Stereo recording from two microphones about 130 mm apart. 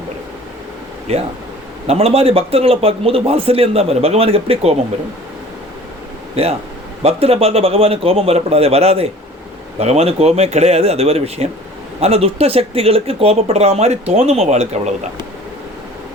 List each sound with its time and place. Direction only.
1.1 s speech: 50° right (ahead or behind)
6.3 s speech: 50° right (ahead or behind)